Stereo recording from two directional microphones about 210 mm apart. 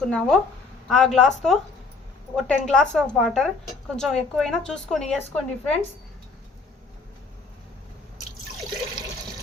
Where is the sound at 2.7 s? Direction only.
5° left (ahead or behind).